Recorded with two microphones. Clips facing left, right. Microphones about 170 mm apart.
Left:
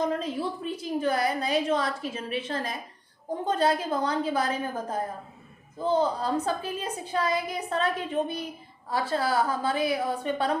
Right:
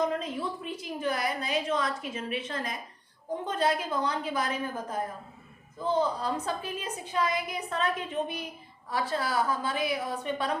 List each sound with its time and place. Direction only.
0.0 s a woman's voice: 35° left (ahead or behind)